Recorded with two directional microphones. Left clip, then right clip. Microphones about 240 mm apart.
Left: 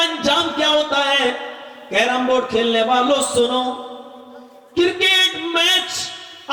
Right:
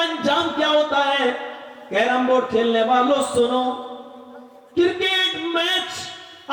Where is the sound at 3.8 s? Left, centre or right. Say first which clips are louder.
Left 1 dB; right.